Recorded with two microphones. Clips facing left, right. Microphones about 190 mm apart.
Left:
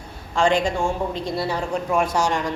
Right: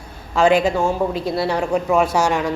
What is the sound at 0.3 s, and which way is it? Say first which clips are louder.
A woman's voice: right 4 dB; 5° right (ahead or behind).